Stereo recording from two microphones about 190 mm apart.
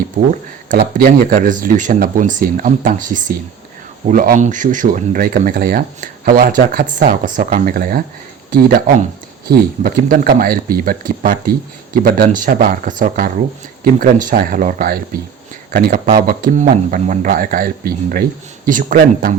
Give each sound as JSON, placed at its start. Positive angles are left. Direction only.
{"t": 0.2, "sound": "speech", "side_deg": -45}